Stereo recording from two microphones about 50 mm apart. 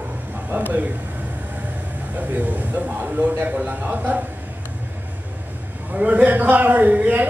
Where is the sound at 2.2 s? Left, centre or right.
Right.